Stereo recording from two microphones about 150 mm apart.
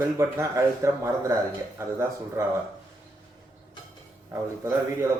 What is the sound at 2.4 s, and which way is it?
Speech, 20° right (ahead or behind).